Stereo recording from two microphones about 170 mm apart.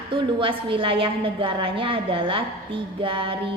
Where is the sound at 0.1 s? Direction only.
30° right (ahead or behind).